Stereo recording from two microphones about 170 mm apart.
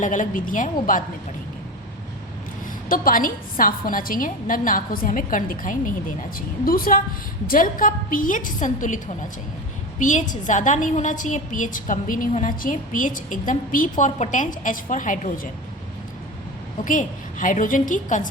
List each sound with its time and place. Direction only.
0.0 s a woman's voice: 50° left (ahead or behind)
2.9 s a woman's voice: 55° left (ahead or behind)
10.0 s a woman's voice: 50° left (ahead or behind)
16.8 s a woman's voice: 50° left (ahead or behind)